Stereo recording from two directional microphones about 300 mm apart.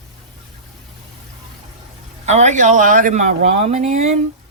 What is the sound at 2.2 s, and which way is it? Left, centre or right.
Speech, right.